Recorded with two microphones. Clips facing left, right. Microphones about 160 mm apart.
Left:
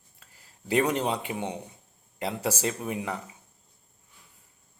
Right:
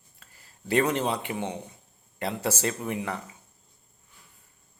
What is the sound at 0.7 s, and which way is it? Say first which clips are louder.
Speech: even; 15° left (ahead or behind).